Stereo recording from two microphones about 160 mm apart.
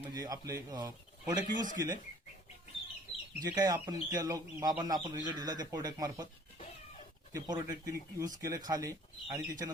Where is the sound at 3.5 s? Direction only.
25° right (ahead or behind).